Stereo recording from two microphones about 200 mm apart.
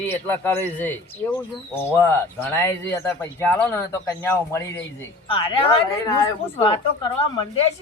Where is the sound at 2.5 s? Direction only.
10° left (ahead or behind).